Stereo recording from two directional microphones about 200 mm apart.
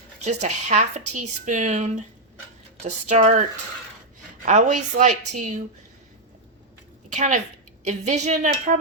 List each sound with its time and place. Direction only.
0.3 s speech: 35° right (ahead or behind)
4.4 s speech: 40° right (ahead or behind)
7.1 s a woman's voice: 35° right (ahead or behind)